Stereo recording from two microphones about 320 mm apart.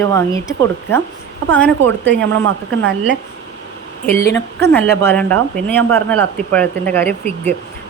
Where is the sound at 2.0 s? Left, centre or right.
Right.